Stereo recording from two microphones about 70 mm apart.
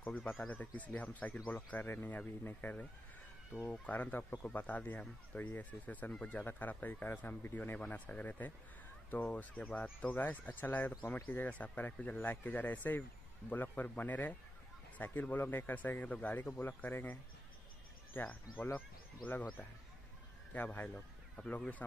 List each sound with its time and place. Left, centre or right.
0.0 s speech: left
20.5 s speech: left